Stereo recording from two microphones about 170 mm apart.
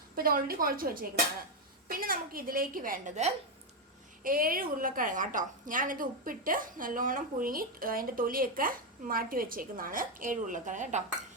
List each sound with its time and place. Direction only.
0.2 s a woman's voice: 60° right (ahead or behind)